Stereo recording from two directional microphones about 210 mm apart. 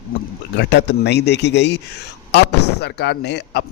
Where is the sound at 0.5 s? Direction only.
55° left (ahead or behind).